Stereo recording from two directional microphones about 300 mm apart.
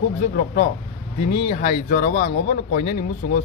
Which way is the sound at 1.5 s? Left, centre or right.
Left.